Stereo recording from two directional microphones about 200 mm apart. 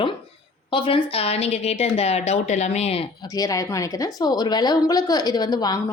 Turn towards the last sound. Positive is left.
turn(degrees=20)  # may be behind; listen again after turning